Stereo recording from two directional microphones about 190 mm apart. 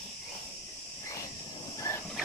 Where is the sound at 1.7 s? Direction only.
15° left (ahead or behind).